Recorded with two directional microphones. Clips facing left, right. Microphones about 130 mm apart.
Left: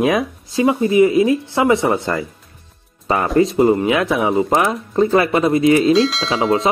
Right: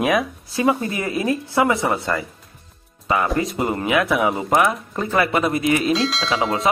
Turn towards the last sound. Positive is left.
turn(degrees=30)  # may be behind; listen again after turning